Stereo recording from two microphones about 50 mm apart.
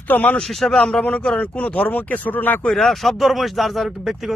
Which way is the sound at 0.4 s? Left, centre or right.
Centre.